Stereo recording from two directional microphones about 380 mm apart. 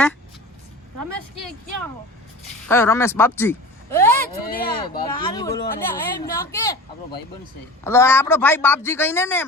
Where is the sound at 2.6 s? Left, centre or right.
Centre.